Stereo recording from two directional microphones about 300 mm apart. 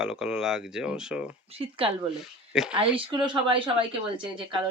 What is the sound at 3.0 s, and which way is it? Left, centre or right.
A woman's voice, centre.